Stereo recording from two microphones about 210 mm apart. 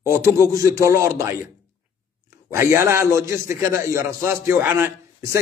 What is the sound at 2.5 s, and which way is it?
A man's voice, 15° right (ahead or behind).